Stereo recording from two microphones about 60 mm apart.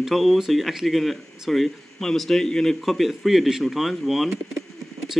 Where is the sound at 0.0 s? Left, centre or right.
Centre.